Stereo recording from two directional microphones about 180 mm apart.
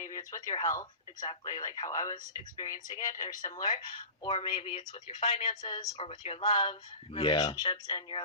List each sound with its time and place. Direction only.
0.0 s speech: 20° left (ahead or behind)